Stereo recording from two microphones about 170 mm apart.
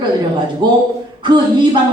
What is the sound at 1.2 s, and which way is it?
Speech, 25° right (ahead or behind).